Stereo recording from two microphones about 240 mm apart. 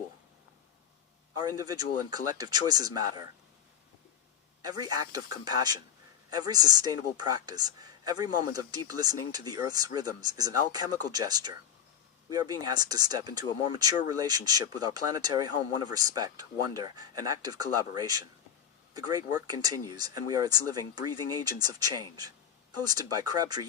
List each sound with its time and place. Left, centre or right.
1.5 s speech: centre
4.6 s speech: centre